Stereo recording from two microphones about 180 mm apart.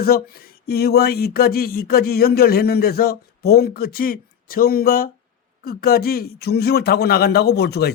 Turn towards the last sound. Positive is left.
turn(degrees=65)  # may be behind; listen again after turning